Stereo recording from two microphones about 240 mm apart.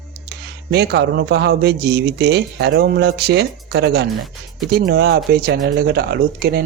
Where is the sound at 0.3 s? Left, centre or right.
Right.